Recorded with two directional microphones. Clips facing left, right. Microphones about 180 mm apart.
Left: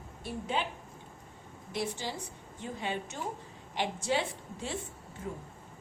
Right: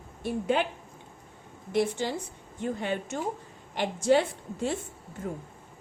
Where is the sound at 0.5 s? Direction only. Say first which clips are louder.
Right 5 dB; 60° right (ahead or behind).